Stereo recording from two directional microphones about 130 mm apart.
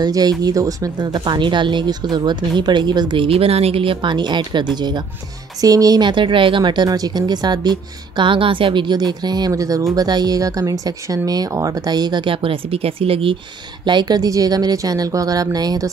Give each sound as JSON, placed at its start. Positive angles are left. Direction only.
{"t": 0.0, "sound": "speech", "side_deg": -30}
{"t": 13.8, "sound": "a woman's voice", "side_deg": -35}